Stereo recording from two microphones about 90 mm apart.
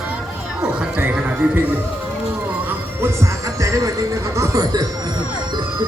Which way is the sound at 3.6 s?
35° right (ahead or behind).